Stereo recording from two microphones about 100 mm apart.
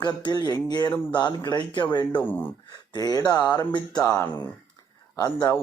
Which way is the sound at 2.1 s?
20° left (ahead or behind).